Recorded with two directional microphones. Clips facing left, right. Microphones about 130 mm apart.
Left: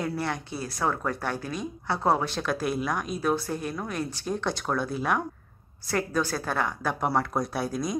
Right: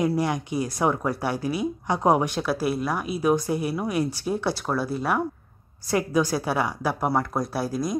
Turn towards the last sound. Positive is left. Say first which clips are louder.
# right 2 dB
turn(degrees=0)  # may be behind; listen again after turning